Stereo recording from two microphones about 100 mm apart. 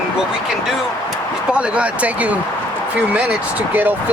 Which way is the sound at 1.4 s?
10° right (ahead or behind).